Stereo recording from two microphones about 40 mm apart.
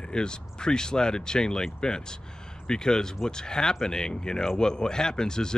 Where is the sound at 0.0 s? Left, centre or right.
Left.